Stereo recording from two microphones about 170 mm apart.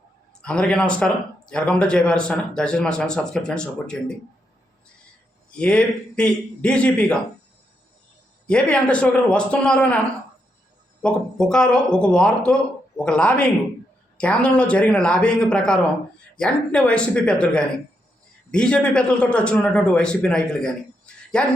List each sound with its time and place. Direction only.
0.4 s speech: 5° left (ahead or behind)
5.5 s a man's voice: 5° left (ahead or behind)
8.4 s a man's voice: 5° left (ahead or behind)
11.0 s a man's voice: 5° left (ahead or behind)